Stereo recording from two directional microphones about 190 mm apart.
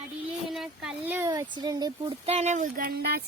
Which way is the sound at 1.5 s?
20° right (ahead or behind).